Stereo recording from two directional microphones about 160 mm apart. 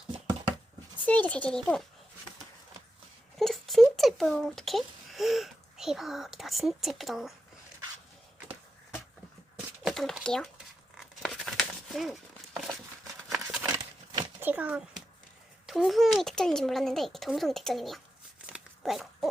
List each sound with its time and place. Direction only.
1.0 s speech: 10° left (ahead or behind)
3.3 s a child's voice: centre (ahead or behind)
9.8 s speech: centre (ahead or behind)
10.9 s tearing: centre (ahead or behind)
13.3 s a sound: centre (ahead or behind)
13.7 s a sound: 25° right (ahead or behind)
14.4 s a child's voice: 10° right (ahead or behind)
18.4 s owl: 5° right (ahead or behind)